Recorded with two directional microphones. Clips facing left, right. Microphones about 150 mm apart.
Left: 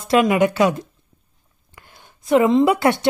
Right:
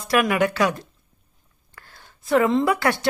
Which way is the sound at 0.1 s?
20° left (ahead or behind).